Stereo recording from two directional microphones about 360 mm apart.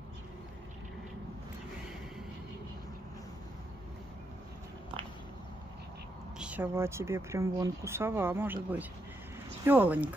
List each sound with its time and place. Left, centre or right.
6.3 s speech: centre